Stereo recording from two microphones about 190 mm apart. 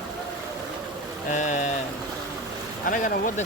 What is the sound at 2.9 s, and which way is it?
Speech, 45° left (ahead or behind).